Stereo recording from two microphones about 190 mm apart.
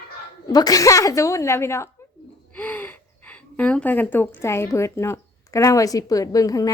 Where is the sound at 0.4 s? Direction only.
20° left (ahead or behind).